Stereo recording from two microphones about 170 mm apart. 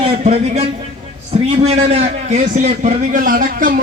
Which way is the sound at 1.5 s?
35° right (ahead or behind).